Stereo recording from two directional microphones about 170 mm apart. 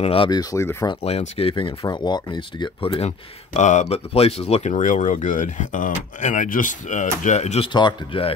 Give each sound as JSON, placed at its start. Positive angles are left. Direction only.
{"t": 0.0, "sound": "speech", "side_deg": 30}
{"t": 1.0, "sound": "speech", "side_deg": 40}
{"t": 3.5, "sound": "speech", "side_deg": 45}
{"t": 7.7, "sound": "speech", "side_deg": 30}